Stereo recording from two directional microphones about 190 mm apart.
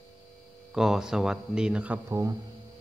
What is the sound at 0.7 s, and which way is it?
Speech, centre (ahead or behind).